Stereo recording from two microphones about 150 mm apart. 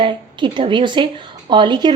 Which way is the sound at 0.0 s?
30° right (ahead or behind).